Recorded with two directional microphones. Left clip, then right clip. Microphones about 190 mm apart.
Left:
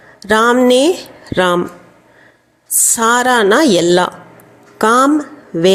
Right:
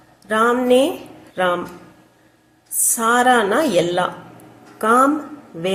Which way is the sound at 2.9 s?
50° left (ahead or behind).